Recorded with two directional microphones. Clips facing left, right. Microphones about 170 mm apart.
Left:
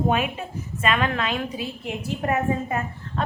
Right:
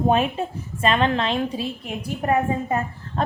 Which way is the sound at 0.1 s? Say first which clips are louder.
Right 4 dB; 30° right (ahead or behind).